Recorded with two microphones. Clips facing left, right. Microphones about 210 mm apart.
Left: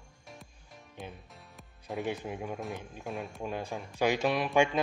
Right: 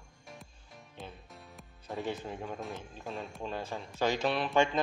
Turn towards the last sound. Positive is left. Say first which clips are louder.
# left 2 dB
turn(degrees=10)  # may be behind; listen again after turning